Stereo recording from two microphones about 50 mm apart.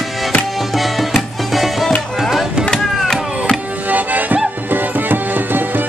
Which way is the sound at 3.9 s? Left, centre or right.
Right.